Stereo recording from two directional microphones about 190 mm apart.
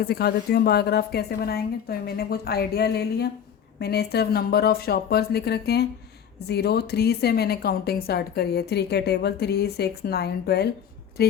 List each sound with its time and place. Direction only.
0.0 s a woman's voice: 55° left (ahead or behind)